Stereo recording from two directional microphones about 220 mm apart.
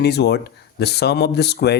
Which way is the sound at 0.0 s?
50° left (ahead or behind).